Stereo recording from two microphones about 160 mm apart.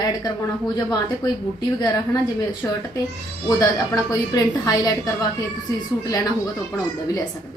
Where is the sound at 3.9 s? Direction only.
25° left (ahead or behind).